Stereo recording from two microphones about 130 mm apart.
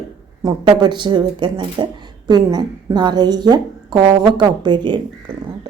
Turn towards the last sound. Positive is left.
turn(degrees=-35)  # may be behind; listen again after turning